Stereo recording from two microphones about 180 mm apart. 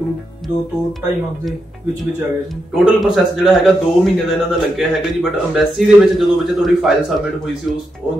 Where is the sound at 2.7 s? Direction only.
Centre (ahead or behind).